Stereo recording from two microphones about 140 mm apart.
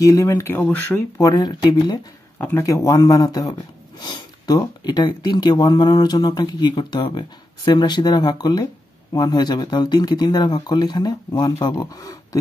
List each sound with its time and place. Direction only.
0.0 s speech: 25° left (ahead or behind)
1.3 s speech: 30° left (ahead or behind)
2.4 s speech: 20° left (ahead or behind)